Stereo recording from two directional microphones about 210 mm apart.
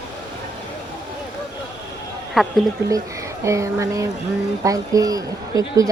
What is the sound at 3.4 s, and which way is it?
Speech, 15° right (ahead or behind).